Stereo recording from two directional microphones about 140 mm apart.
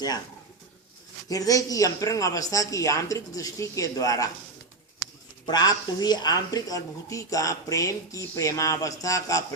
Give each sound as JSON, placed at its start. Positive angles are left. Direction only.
{"t": 1.3, "sound": "speech", "side_deg": 25}
{"t": 5.5, "sound": "speech", "side_deg": 30}